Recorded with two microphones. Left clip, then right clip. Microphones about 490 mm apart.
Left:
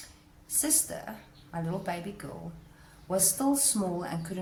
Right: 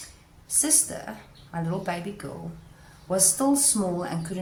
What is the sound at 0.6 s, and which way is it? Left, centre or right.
Speech, left.